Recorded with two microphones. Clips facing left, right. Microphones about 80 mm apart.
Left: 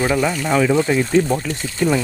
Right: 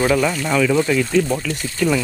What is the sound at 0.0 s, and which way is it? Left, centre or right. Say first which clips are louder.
Speech: right 1 dB; centre.